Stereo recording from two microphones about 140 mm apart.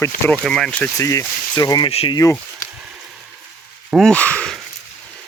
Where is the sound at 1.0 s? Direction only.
25° left (ahead or behind).